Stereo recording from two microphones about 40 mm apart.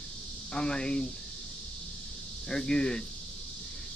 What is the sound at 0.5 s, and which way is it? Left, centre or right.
Speech, left.